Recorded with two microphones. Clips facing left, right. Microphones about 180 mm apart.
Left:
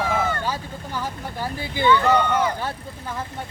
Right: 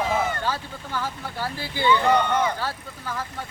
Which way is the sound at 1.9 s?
15° right (ahead or behind).